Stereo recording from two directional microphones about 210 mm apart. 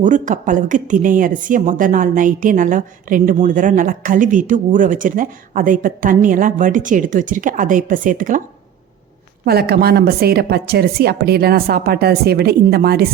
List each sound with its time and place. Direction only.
0.0 s a woman's voice: 35° right (ahead or behind)
9.4 s a woman's voice: 50° right (ahead or behind)